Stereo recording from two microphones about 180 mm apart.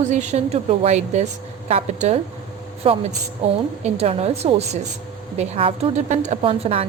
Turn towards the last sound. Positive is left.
turn(degrees=-35)  # may be behind; listen again after turning